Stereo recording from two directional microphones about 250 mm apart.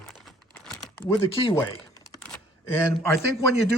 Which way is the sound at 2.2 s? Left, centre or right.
Centre.